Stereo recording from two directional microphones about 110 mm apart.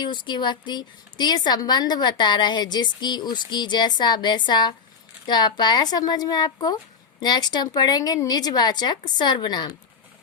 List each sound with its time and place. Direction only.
0.0 s a woman's voice: 40° left (ahead or behind)